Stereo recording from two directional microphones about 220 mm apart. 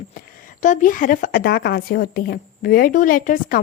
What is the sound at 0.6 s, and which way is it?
A woman's voice, 35° left (ahead or behind).